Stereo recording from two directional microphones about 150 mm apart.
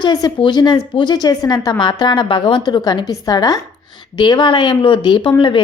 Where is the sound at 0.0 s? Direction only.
25° left (ahead or behind).